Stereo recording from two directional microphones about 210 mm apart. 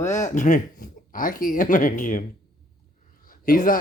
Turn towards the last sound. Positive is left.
turn(degrees=40)  # may be behind; listen again after turning